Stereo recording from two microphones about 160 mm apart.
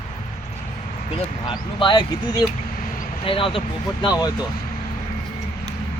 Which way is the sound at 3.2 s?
35° left (ahead or behind).